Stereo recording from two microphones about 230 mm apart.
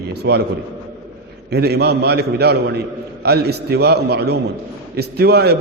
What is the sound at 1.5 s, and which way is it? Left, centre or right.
A man's voice, right.